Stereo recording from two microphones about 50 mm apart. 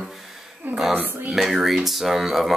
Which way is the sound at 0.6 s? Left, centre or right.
Right.